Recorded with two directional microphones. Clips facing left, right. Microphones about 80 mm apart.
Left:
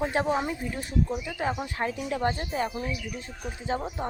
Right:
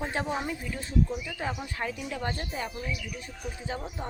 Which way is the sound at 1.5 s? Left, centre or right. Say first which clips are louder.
Left 4 dB; left.